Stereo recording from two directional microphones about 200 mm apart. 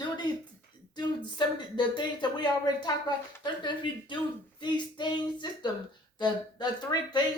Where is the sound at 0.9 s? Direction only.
20° left (ahead or behind).